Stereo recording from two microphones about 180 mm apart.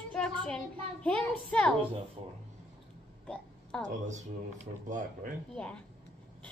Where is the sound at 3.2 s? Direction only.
5° left (ahead or behind).